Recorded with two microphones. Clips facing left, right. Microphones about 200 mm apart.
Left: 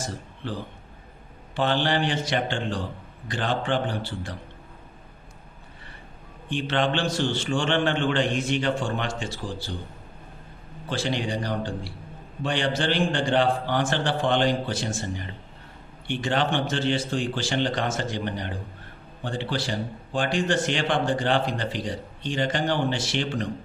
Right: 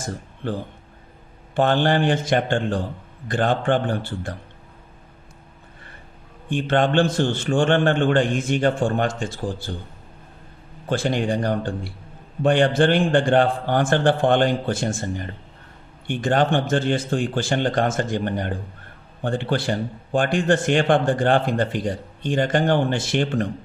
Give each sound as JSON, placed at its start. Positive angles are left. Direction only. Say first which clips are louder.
{"t": 0.4, "sound": "speech", "louder": "right 6 dB", "side_deg": -55}
{"t": 6.5, "sound": "speech", "louder": "right 5 dB", "side_deg": -50}
{"t": 10.8, "sound": "speech", "louder": "right 6 dB", "side_deg": -50}